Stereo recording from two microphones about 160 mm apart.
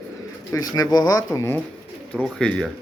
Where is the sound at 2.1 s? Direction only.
5° left (ahead or behind).